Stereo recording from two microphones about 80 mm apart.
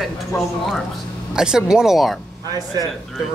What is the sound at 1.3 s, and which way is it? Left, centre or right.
Speech, centre.